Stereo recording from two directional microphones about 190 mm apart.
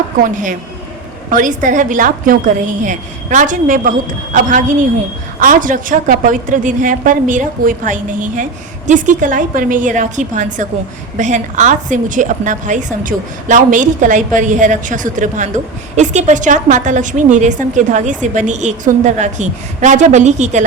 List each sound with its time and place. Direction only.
1.3 s a woman's voice: 45° right (ahead or behind)
5.4 s a woman's voice: 45° right (ahead or behind)